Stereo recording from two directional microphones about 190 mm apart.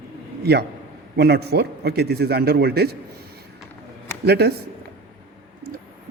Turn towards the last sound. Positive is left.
turn(degrees=-55)  # may be behind; listen again after turning